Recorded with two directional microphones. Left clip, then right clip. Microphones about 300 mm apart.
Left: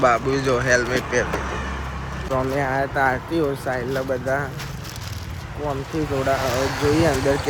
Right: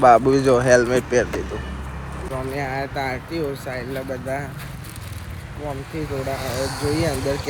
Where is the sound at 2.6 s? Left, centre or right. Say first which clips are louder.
Left 4 dB; centre.